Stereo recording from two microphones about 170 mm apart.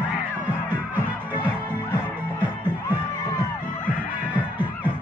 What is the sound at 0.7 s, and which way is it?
Music, 10° right (ahead or behind).